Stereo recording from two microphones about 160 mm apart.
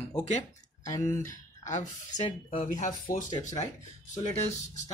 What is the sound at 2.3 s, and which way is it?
Speech, 40° left (ahead or behind).